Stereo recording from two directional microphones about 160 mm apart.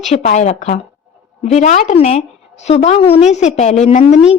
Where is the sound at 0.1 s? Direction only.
50° left (ahead or behind).